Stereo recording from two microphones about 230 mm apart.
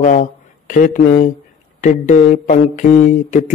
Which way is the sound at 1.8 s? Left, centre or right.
Left.